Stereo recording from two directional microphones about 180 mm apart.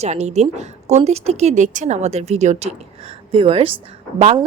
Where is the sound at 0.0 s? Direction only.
40° right (ahead or behind).